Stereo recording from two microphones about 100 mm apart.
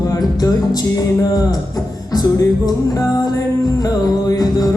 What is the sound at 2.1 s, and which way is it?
Music, 35° left (ahead or behind).